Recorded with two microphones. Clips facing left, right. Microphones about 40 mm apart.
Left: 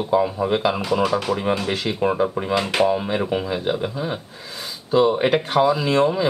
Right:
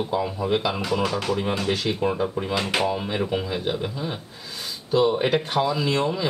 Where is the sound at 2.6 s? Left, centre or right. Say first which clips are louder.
Left 5 dB; centre.